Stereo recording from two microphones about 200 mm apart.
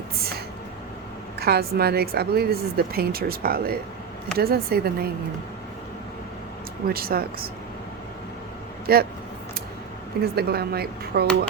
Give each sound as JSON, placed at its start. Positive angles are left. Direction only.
{"t": 0.2, "sound": "a sound", "side_deg": -50}
{"t": 1.4, "sound": "a woman's voice", "side_deg": -50}
{"t": 6.8, "sound": "a woman's voice", "side_deg": -50}
{"t": 8.9, "sound": "a woman's voice", "side_deg": -50}
{"t": 10.3, "sound": "a woman's voice", "side_deg": -50}